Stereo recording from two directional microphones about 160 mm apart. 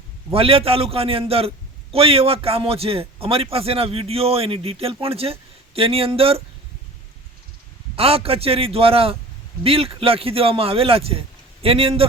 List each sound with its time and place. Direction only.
0.3 s a man's voice: 35° right (ahead or behind)
7.9 s a man's voice: 35° right (ahead or behind)